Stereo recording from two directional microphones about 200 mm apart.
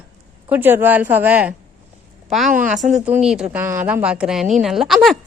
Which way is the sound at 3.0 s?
5° right (ahead or behind).